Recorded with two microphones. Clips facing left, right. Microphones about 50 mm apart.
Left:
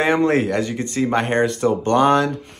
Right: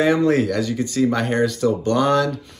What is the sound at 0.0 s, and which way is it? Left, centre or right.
Speech, left.